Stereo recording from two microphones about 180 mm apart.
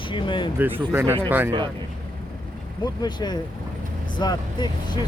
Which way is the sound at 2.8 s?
25° left (ahead or behind).